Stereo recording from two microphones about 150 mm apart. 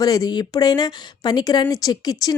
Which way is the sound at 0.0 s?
25° left (ahead or behind).